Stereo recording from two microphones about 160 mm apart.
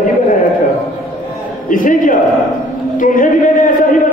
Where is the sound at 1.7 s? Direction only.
55° left (ahead or behind).